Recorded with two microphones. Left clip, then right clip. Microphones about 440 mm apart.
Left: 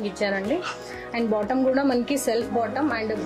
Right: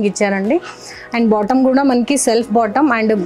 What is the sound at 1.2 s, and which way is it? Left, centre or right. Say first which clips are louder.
Speech: right 10 dB; right.